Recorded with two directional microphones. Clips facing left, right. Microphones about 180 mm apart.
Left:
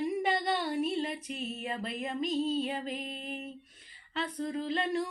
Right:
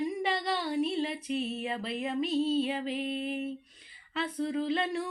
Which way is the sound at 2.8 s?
40° left (ahead or behind).